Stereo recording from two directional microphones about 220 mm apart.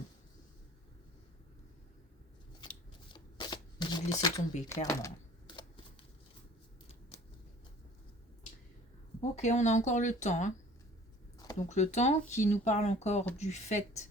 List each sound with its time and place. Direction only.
2.6 s scissors: 20° left (ahead or behind)
3.1 s shuffling cards: 20° left (ahead or behind)
4.7 s speech: 15° left (ahead or behind)
5.5 s a sound: 20° left (ahead or behind)
9.3 s speech: 30° left (ahead or behind)
11.7 s speech: 30° left (ahead or behind)